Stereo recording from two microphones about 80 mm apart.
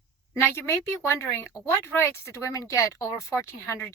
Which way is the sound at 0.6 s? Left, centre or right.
Left.